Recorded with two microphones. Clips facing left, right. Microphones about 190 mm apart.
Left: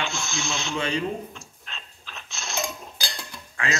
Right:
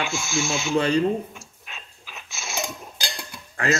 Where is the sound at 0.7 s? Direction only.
40° right (ahead or behind).